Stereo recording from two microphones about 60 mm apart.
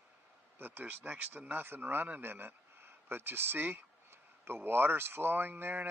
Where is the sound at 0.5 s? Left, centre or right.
Right.